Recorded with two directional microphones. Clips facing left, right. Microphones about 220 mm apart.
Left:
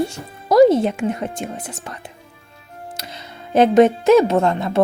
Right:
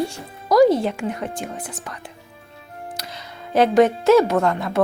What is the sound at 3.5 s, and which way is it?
Speech, 20° left (ahead or behind).